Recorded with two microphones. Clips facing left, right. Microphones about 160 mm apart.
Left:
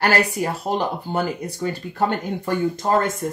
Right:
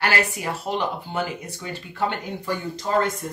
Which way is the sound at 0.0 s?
40° left (ahead or behind).